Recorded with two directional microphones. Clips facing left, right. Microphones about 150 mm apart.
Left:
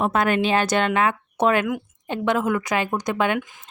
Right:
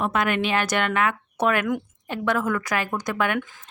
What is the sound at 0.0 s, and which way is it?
Speech, 35° left (ahead or behind).